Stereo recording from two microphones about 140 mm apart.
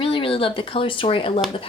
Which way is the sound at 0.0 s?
40° left (ahead or behind).